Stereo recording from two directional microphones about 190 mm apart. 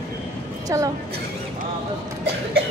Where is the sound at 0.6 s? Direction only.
15° right (ahead or behind).